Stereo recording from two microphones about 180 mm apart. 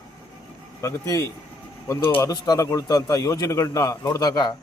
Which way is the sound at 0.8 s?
15° left (ahead or behind).